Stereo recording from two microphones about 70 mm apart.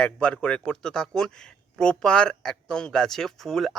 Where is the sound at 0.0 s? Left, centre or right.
Centre.